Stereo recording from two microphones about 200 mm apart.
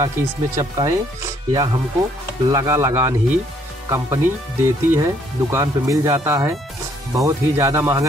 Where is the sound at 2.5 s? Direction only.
15° right (ahead or behind).